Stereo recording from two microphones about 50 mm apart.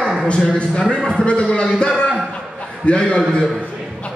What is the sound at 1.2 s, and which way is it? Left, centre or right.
Speech, centre.